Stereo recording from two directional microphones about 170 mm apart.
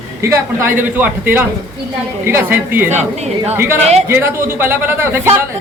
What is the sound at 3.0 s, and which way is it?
Speech, 40° right (ahead or behind).